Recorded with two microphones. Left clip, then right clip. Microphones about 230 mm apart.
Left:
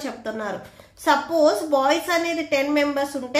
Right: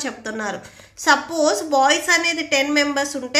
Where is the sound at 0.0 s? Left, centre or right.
Centre.